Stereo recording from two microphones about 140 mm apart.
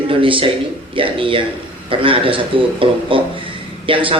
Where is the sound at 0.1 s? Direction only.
40° right (ahead or behind).